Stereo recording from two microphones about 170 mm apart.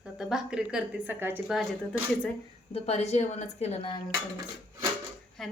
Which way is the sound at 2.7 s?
40° left (ahead or behind).